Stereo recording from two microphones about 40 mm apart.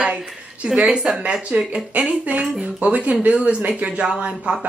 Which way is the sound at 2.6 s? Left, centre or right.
Right.